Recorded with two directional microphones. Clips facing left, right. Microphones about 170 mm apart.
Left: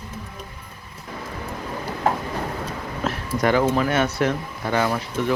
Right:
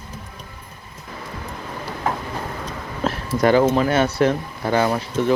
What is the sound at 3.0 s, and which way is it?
Speech, 30° right (ahead or behind).